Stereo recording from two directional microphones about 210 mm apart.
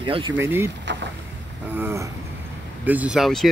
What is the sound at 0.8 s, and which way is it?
Boat, 55° right (ahead or behind).